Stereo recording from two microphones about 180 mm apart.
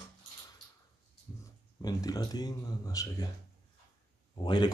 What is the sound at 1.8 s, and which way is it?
Speech, 20° left (ahead or behind).